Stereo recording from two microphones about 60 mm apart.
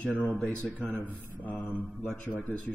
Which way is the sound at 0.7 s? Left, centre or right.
Left.